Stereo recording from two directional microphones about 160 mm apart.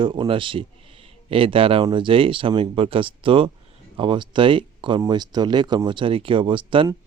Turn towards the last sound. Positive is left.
turn(degrees=-30)  # may be behind; listen again after turning